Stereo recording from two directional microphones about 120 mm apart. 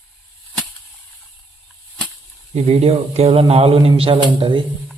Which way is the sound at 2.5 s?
60° right (ahead or behind).